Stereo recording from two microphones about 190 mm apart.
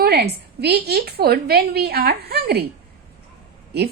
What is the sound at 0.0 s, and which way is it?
A woman's voice, 55° right (ahead or behind).